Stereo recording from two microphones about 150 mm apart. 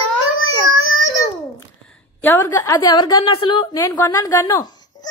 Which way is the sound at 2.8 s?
25° left (ahead or behind).